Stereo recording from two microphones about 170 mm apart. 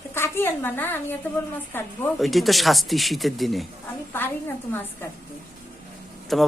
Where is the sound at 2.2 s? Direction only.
Centre (ahead or behind).